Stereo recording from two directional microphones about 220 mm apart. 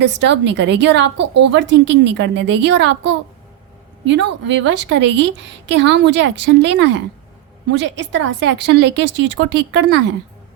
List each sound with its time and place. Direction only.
0.0 s a woman's voice: 55° right (ahead or behind)